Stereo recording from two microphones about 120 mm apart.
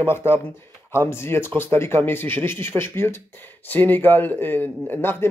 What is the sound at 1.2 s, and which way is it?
A man's voice, 20° left (ahead or behind).